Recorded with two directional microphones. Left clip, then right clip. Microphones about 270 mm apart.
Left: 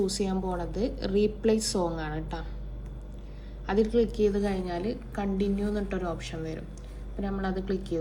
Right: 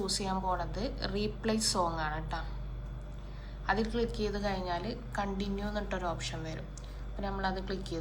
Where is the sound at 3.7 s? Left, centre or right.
Right.